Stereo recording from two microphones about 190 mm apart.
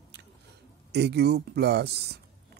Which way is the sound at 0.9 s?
60° right (ahead or behind).